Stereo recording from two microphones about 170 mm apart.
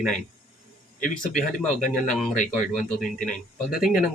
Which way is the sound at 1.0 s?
50° left (ahead or behind).